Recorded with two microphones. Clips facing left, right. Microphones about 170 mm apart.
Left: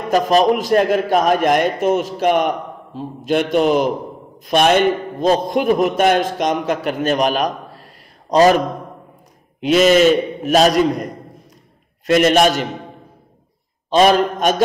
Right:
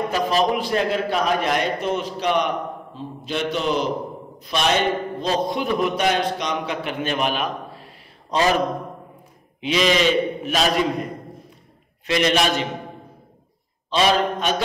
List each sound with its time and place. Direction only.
0.1 s a man's voice: 50° left (ahead or behind)
9.6 s a man's voice: 45° left (ahead or behind)
12.1 s a man's voice: 50° left (ahead or behind)
13.8 s a man's voice: 50° left (ahead or behind)